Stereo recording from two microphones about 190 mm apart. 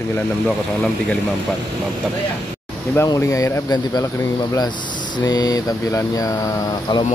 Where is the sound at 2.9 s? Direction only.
15° left (ahead or behind).